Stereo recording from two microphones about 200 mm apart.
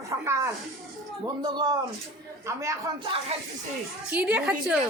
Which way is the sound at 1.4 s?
20° right (ahead or behind).